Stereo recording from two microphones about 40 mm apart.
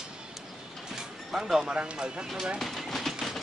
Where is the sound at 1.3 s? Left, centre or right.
Centre.